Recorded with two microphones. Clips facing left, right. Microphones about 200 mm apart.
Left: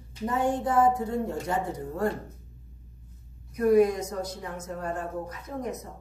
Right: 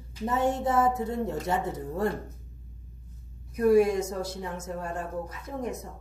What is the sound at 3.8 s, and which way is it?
A woman's voice, 25° right (ahead or behind).